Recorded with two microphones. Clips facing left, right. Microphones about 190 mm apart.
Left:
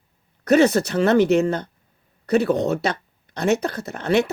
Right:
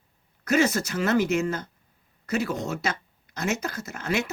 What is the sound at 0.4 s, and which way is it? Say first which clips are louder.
Speech: left 7 dB; 35° left (ahead or behind).